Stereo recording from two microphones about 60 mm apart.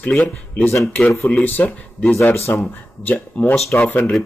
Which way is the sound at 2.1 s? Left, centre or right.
Left.